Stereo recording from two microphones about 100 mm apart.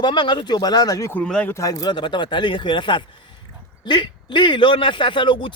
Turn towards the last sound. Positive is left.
turn(degrees=55)  # may be behind; listen again after turning